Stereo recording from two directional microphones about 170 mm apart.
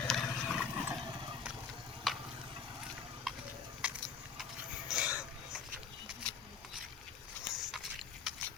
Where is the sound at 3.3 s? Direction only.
Centre (ahead or behind).